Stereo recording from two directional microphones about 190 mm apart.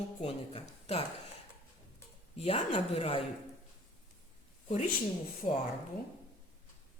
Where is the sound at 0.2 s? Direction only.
30° left (ahead or behind).